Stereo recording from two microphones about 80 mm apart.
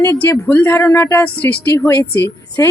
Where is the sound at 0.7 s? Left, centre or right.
Left.